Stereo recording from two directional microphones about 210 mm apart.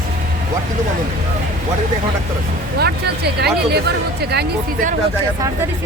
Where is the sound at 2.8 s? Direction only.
50° right (ahead or behind).